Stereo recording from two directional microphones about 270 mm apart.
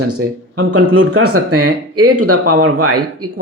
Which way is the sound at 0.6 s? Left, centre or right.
Right.